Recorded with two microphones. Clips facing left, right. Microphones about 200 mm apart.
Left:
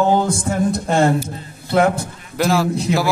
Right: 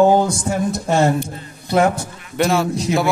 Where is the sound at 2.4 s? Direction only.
Centre (ahead or behind).